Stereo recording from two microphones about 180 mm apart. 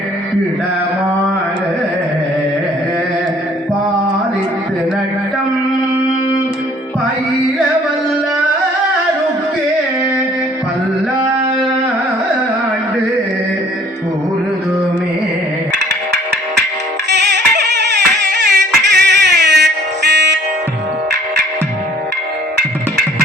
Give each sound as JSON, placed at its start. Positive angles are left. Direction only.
{"t": 17.1, "sound": "music", "side_deg": -70}